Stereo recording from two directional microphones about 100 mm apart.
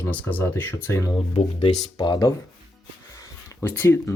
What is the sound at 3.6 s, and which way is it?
Speech, 20° left (ahead or behind).